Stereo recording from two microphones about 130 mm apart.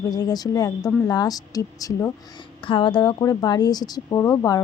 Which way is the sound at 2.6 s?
40° left (ahead or behind).